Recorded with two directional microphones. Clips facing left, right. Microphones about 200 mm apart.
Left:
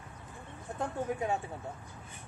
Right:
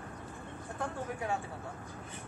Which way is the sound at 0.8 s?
20° left (ahead or behind).